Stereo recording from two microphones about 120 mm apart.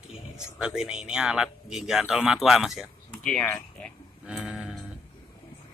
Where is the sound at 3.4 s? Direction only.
15° left (ahead or behind).